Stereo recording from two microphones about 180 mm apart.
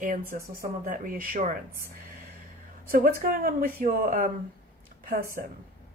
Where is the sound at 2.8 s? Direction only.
55° right (ahead or behind).